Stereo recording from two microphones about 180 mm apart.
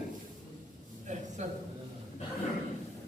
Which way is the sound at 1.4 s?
40° right (ahead or behind).